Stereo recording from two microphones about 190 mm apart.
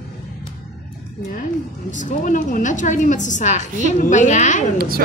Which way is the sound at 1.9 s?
40° left (ahead or behind).